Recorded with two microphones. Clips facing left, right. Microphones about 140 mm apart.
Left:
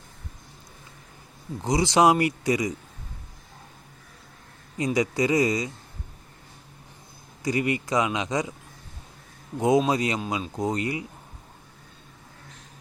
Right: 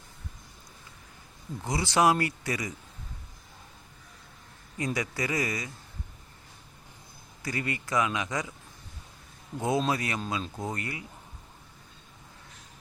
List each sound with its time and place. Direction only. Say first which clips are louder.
1.6 s speech: left 5 dB; 20° left (ahead or behind)
4.9 s speech: left 11 dB; 20° left (ahead or behind)
7.4 s speech: left 8 dB; 20° left (ahead or behind)
9.6 s speech: left 6 dB; 20° left (ahead or behind)